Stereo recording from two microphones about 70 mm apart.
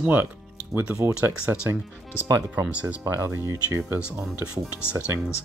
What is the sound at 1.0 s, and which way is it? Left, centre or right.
Speech, right.